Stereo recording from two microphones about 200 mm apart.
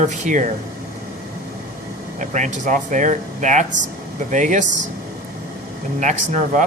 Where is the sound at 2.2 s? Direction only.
40° right (ahead or behind).